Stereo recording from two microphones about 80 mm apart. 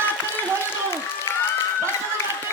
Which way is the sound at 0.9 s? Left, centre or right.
Left.